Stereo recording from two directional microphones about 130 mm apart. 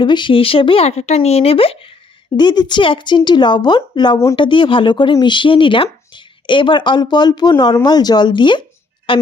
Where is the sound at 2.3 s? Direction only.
35° left (ahead or behind).